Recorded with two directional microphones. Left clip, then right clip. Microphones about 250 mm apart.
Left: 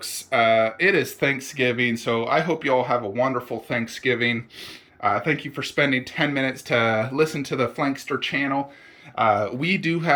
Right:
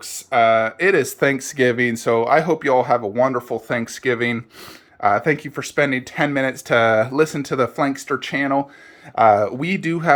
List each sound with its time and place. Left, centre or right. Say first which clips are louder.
0.0 s speech: right 4 dB; centre